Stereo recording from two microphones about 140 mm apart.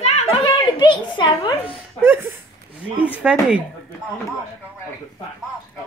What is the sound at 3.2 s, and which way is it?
Speech, 5° right (ahead or behind).